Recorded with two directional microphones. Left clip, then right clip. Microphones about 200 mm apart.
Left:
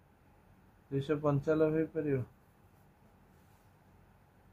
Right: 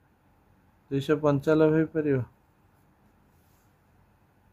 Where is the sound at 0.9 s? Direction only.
50° right (ahead or behind).